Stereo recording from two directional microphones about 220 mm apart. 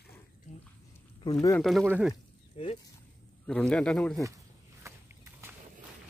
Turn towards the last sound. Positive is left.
turn(degrees=5)  # may be behind; listen again after turning